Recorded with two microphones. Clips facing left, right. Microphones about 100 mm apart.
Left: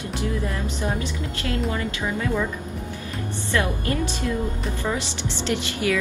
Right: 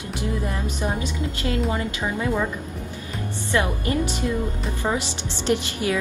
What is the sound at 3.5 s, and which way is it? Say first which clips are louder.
A woman's voice: right 1 dB; 20° right (ahead or behind).